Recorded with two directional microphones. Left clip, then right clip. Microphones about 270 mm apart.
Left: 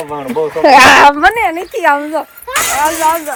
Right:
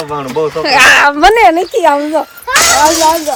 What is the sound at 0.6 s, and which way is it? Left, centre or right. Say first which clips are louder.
Speech: left 2 dB; centre.